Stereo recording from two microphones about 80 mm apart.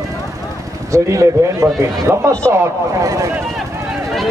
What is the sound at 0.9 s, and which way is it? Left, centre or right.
A man's voice, right.